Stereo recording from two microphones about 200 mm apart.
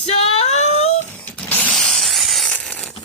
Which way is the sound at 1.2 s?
5° left (ahead or behind).